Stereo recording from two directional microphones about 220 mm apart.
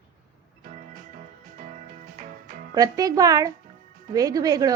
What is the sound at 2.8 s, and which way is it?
A woman's voice, 15° right (ahead or behind).